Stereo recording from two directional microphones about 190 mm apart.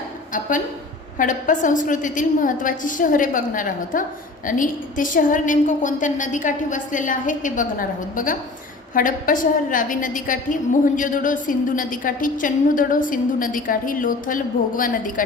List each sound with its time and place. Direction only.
1.2 s a woman's voice: 45° left (ahead or behind)